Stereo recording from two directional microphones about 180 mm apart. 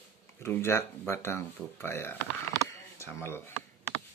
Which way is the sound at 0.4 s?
15° left (ahead or behind).